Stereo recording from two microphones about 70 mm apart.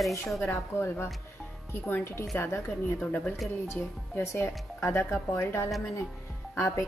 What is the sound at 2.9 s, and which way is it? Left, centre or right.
Speech, left.